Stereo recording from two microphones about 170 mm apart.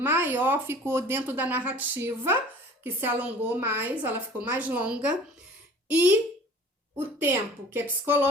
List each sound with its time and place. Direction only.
0.0 s speech: 10° right (ahead or behind)
6.9 s speech: 10° right (ahead or behind)